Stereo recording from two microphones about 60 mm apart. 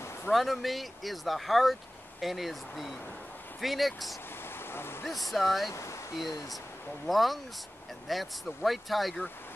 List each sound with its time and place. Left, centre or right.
0.3 s speech: centre
4.6 s a sound: left
5.0 s speech: centre
5.7 s speech: left
7.1 s speech: centre